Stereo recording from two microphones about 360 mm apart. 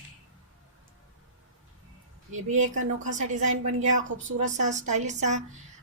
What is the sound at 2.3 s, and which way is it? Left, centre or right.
A woman's voice, centre.